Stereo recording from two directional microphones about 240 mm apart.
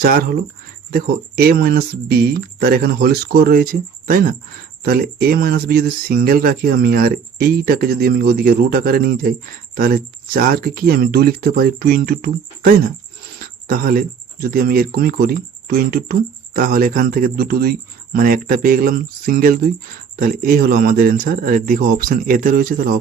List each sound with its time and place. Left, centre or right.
0.0 s speech: right